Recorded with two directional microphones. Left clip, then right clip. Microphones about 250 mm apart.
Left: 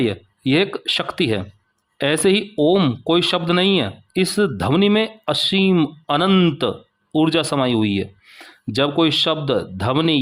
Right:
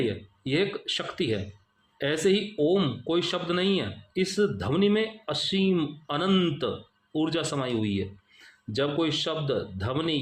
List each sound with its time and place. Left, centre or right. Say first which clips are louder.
0.1 s speech: left 10 dB; left